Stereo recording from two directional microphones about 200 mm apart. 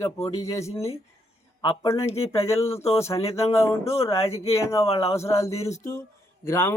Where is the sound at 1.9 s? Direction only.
30° left (ahead or behind).